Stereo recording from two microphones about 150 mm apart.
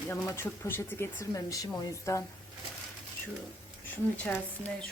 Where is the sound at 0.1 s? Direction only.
15° left (ahead or behind).